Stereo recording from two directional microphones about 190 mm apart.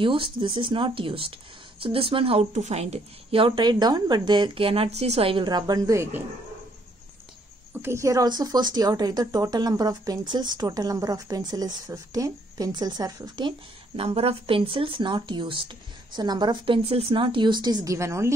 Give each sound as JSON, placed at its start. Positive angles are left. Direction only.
{"t": 0.0, "sound": "speech", "side_deg": -25}
{"t": 7.8, "sound": "speech", "side_deg": -15}